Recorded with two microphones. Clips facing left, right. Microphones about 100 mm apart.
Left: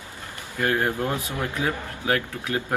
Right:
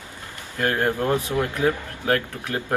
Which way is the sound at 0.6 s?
15° left (ahead or behind).